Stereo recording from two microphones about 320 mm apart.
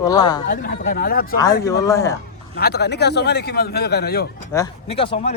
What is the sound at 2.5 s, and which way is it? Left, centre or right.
Speech, left.